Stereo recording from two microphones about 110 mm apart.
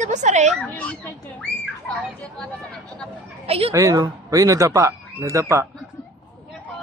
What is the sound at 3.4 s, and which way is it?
Speech, 65° right (ahead or behind).